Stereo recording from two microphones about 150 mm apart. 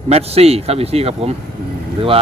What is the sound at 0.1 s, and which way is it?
Speech, 45° right (ahead or behind).